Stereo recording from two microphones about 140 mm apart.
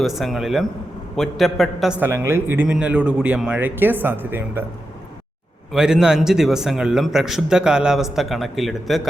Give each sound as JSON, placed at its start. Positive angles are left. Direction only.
{"t": 0.0, "sound": "a man's voice", "side_deg": 0}
{"t": 2.0, "sound": "a man's voice", "side_deg": -20}
{"t": 5.7, "sound": "a man's voice", "side_deg": -5}